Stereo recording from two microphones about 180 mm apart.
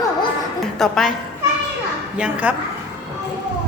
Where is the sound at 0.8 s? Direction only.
Centre (ahead or behind).